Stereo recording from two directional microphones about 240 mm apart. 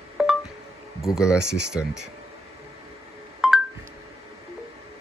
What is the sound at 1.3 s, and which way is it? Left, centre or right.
Speech, right.